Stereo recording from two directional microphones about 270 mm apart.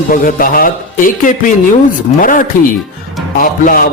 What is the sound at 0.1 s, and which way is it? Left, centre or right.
Speech, left.